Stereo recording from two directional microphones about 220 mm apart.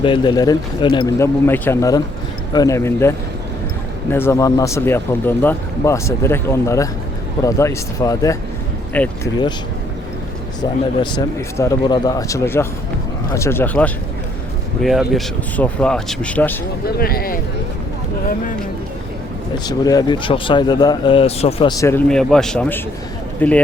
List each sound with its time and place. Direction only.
0.0 s speech: 20° left (ahead or behind)
10.6 s speech: 20° left (ahead or behind)
16.8 s speech: 45° left (ahead or behind)
19.6 s speech: 15° left (ahead or behind)